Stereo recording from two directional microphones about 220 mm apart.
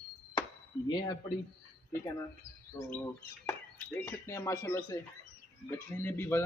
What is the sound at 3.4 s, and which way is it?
Speech, 10° left (ahead or behind).